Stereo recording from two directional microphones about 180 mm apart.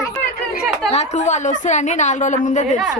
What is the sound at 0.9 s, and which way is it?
A woman's voice, 40° left (ahead or behind).